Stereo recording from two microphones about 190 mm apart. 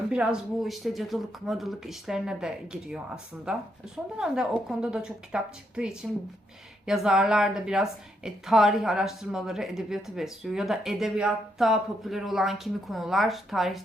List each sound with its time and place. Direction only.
0.1 s a woman's voice: 5° right (ahead or behind)